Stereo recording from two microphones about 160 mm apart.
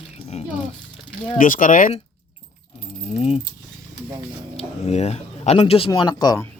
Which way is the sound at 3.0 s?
45° left (ahead or behind).